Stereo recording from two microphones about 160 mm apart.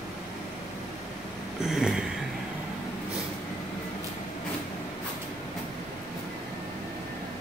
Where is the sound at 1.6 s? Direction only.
5° right (ahead or behind).